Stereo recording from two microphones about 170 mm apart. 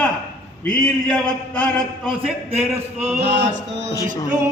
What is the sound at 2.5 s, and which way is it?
Speech, 35° right (ahead or behind).